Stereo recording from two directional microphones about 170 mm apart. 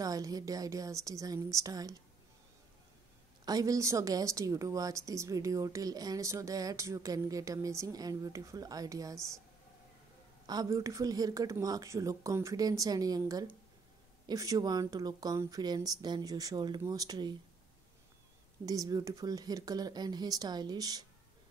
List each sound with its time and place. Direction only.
0.0 s a woman's voice: 20° right (ahead or behind)
3.4 s a woman's voice: 20° right (ahead or behind)
10.4 s a woman's voice: 20° right (ahead or behind)
18.7 s a woman's voice: 20° right (ahead or behind)